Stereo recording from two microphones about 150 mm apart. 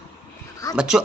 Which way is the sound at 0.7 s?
5° right (ahead or behind).